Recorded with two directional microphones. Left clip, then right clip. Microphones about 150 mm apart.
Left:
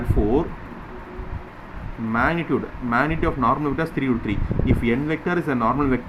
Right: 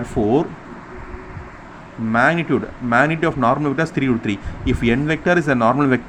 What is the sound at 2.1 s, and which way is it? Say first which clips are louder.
Speech: right 5 dB; 45° right (ahead or behind).